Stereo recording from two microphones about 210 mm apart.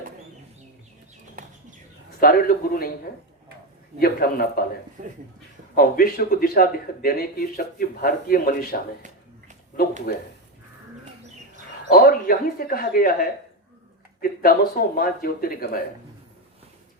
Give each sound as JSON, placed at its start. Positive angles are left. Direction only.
{"t": 2.2, "sound": "speech", "side_deg": 45}
{"t": 4.0, "sound": "speech", "side_deg": 45}
{"t": 5.0, "sound": "speech", "side_deg": -40}
{"t": 5.7, "sound": "speech", "side_deg": 45}
{"t": 10.1, "sound": "speech", "side_deg": 45}
{"t": 11.9, "sound": "speech", "side_deg": 45}